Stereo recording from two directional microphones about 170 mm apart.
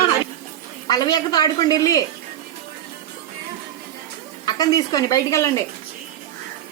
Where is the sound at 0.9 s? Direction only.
25° left (ahead or behind).